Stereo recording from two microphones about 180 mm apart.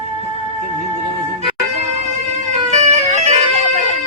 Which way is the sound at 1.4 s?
40° right (ahead or behind).